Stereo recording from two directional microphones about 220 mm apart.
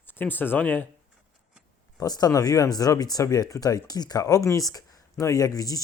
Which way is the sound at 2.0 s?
15° left (ahead or behind).